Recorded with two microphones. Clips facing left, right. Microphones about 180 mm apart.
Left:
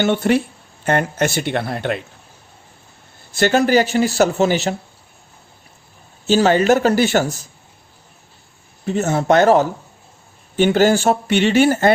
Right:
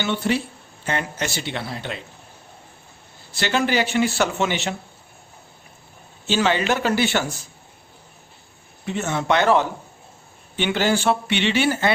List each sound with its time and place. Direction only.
0.0 s speech: 55° left (ahead or behind)
3.3 s speech: 45° left (ahead or behind)
6.2 s speech: 40° left (ahead or behind)
8.9 s speech: 40° left (ahead or behind)